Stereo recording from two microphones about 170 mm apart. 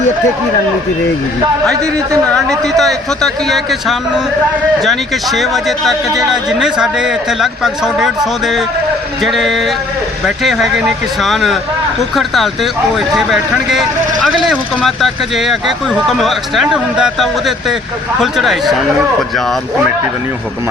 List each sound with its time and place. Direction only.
2.3 s speech: centre (ahead or behind)